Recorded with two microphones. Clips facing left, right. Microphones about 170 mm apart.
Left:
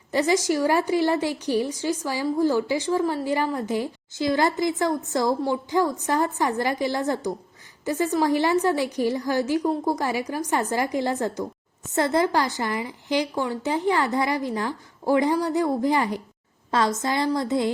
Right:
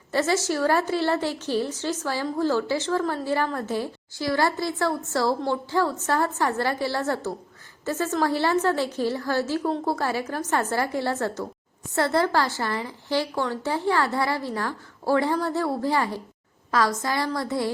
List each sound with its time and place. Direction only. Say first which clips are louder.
0.1 s a woman's voice: left 2 dB; 15° left (ahead or behind)